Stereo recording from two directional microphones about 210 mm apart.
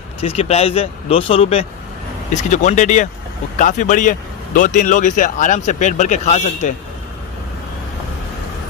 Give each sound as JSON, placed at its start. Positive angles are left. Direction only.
{"t": 0.2, "sound": "a man's voice", "side_deg": 30}